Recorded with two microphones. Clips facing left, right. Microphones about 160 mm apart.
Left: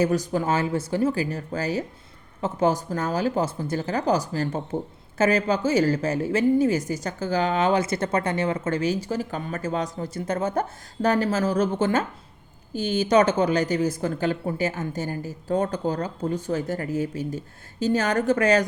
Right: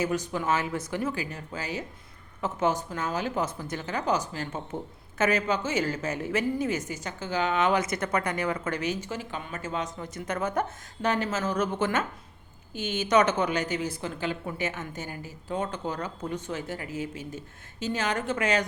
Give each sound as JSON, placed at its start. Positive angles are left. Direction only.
{"t": 0.0, "sound": "speech", "side_deg": 40}